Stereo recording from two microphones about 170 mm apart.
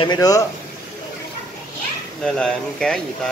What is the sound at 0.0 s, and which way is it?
Speech, 25° left (ahead or behind).